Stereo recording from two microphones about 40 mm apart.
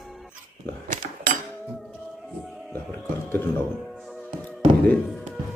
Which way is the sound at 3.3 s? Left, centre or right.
Left.